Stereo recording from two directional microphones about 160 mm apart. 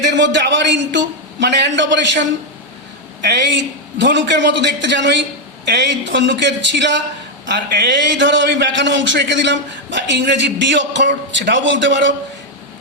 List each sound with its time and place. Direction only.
0.0 s a man's voice: 90° right
3.2 s a man's voice: 90° right